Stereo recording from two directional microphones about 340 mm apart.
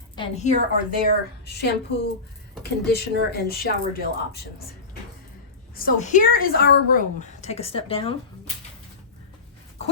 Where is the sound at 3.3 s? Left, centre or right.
Left.